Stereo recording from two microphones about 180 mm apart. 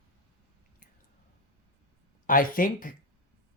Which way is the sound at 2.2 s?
50° left (ahead or behind).